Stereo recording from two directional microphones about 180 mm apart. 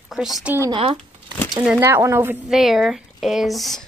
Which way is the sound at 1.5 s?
10° right (ahead or behind).